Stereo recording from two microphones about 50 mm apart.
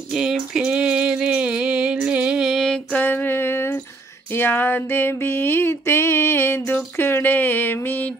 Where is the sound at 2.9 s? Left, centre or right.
Left.